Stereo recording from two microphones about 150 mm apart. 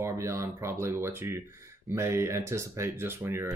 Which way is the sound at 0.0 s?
20° right (ahead or behind).